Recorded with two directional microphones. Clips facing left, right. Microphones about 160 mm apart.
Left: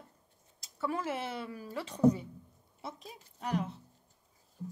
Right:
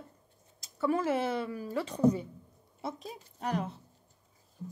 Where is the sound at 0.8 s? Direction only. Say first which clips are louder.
Right 6 dB; 45° right (ahead or behind).